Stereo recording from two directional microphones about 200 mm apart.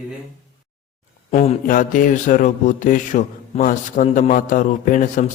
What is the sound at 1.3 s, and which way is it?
Mantra, 35° left (ahead or behind).